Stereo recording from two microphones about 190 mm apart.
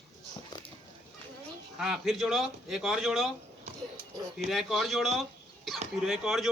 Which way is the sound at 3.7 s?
35° right (ahead or behind).